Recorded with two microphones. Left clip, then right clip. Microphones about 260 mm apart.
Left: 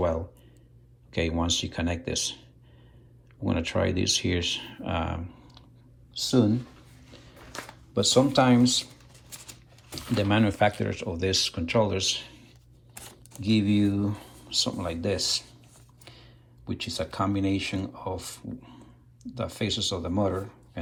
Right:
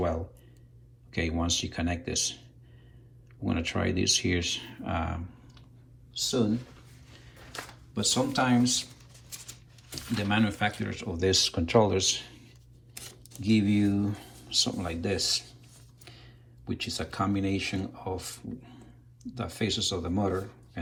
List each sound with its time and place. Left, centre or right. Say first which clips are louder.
1.1 s speech: left 3 dB; centre
3.4 s speech: left 3 dB; centre
7.9 s speech: left 6 dB; centre
9.9 s speech: left 4 dB; centre